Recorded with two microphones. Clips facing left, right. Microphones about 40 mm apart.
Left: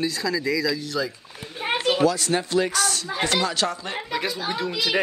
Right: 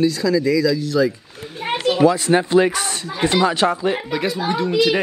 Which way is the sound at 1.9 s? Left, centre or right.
Right.